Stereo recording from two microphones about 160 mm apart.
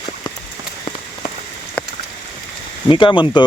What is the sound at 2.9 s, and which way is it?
Speech, 30° left (ahead or behind).